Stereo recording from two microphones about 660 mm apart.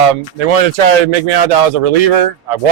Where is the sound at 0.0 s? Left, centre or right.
Right.